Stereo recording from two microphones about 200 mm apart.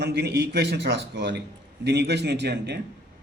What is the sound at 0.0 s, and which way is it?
A man's voice, 55° right (ahead or behind).